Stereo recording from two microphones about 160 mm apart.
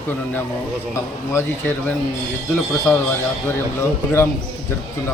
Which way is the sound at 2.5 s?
15° left (ahead or behind).